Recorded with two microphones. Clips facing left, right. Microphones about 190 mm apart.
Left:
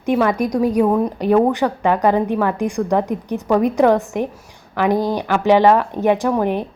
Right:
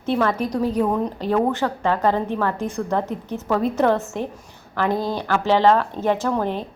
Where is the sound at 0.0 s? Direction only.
15° left (ahead or behind).